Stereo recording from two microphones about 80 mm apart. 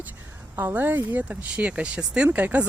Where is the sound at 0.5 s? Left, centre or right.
Right.